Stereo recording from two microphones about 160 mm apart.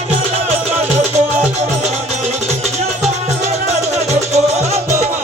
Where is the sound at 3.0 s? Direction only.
40° right (ahead or behind).